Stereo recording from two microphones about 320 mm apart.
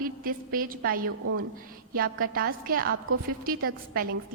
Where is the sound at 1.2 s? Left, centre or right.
Right.